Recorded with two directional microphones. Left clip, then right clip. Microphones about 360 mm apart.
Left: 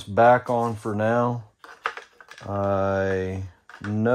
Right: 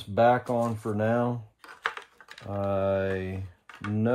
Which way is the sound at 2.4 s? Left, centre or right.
Left.